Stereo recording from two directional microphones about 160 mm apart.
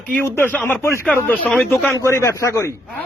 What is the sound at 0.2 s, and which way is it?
Speech, 15° left (ahead or behind).